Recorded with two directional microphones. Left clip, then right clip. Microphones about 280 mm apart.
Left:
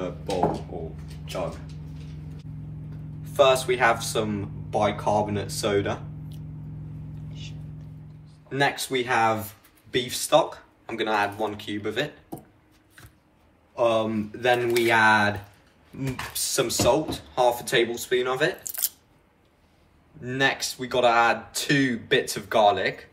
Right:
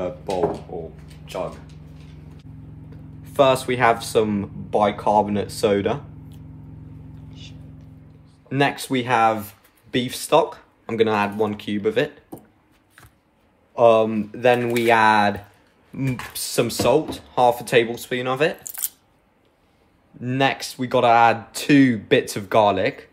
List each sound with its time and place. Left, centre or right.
3.3 s speech: right
8.5 s speech: right
13.7 s speech: right
16.3 s speech: right
20.2 s speech: right